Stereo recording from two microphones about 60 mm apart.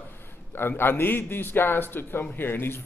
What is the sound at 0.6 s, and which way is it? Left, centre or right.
A man's voice, left.